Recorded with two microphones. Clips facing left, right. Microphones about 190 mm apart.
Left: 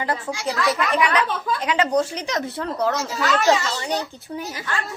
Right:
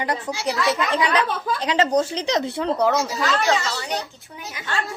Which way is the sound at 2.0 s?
25° right (ahead or behind).